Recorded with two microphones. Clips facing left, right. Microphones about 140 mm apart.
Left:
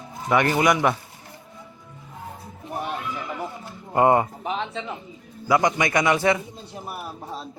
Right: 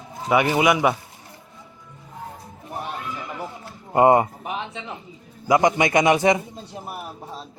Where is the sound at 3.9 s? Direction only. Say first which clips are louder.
Right 3 dB; 15° right (ahead or behind).